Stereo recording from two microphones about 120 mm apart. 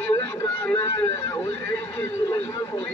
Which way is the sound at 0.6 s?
20° left (ahead or behind).